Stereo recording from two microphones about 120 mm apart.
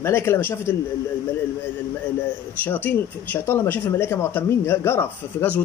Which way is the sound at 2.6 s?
15° left (ahead or behind).